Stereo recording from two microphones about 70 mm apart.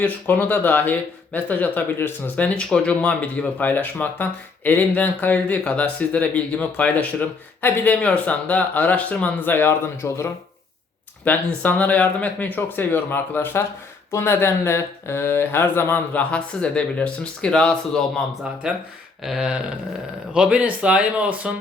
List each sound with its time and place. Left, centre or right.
0.0 s speech: left
2.3 s speech: centre
9.5 s speech: left
11.3 s speech: left
16.3 s speech: centre
19.2 s speech: centre